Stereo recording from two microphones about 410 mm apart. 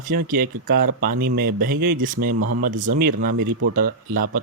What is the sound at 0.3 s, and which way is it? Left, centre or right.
Speech, right.